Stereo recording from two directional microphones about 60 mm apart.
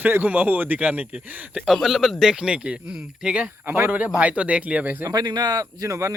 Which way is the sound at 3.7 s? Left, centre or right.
Right.